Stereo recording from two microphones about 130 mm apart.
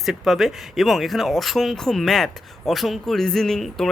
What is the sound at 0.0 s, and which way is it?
Speech, centre (ahead or behind).